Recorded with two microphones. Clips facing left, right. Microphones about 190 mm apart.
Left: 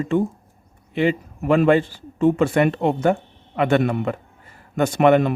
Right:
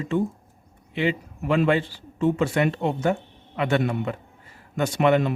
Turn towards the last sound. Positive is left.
turn(degrees=55)  # may be behind; listen again after turning